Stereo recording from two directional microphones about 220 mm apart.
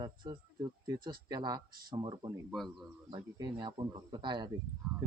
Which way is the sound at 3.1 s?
20° right (ahead or behind).